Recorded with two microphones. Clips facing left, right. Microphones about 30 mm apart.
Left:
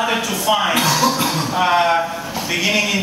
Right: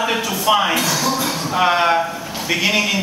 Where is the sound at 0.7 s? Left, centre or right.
Left.